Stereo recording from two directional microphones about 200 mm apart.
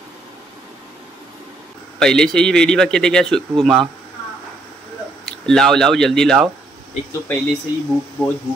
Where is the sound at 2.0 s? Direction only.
5° left (ahead or behind).